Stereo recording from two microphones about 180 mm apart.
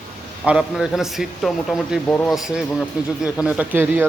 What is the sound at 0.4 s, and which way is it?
A man's voice, 5° right (ahead or behind).